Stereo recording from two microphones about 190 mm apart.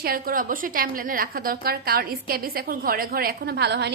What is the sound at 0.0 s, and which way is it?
A woman's voice, 50° right (ahead or behind).